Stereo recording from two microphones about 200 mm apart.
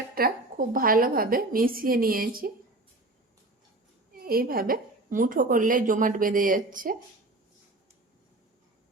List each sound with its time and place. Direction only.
0.1 s a woman's voice: 50° right (ahead or behind)
4.1 s a woman's voice: 45° right (ahead or behind)